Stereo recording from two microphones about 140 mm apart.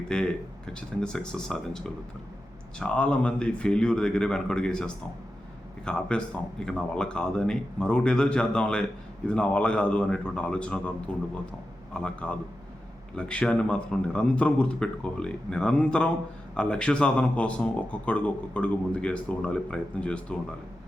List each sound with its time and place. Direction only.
0.1 s speech: 5° left (ahead or behind)
12.0 s speech: 10° left (ahead or behind)